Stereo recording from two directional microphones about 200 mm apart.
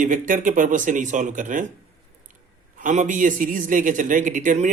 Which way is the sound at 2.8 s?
40° right (ahead or behind).